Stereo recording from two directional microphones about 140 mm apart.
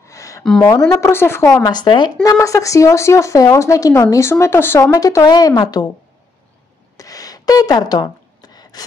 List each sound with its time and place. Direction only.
0.0 s a sound: 20° left (ahead or behind)
0.6 s a woman's voice: 25° left (ahead or behind)
1.6 s a woman's voice: 30° left (ahead or behind)
4.9 s a woman's voice: 25° left (ahead or behind)
7.0 s gasp: 25° left (ahead or behind)